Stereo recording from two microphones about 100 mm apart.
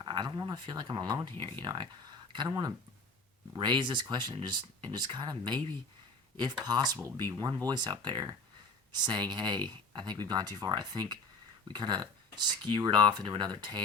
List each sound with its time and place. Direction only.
0.0 s speech: 50° right (ahead or behind)
3.6 s speech: 50° right (ahead or behind)